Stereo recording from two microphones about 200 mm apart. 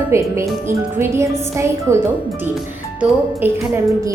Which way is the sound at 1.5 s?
15° right (ahead or behind).